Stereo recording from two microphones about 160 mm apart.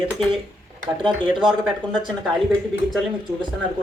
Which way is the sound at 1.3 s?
30° right (ahead or behind).